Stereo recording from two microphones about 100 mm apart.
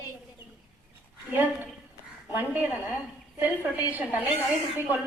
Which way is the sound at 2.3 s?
15° right (ahead or behind).